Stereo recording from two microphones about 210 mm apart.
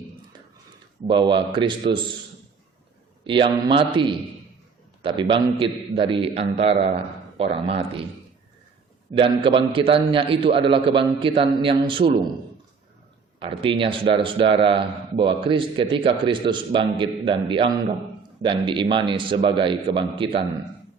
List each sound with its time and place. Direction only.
1.0 s a man's voice: 25° right (ahead or behind)
3.2 s a man's voice: 25° right (ahead or behind)
5.0 s a man's voice: 25° right (ahead or behind)
9.1 s a man's voice: 25° right (ahead or behind)
13.4 s a man's voice: 25° right (ahead or behind)